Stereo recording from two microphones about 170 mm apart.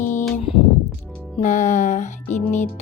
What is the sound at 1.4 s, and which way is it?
A woman's voice, 45° left (ahead or behind).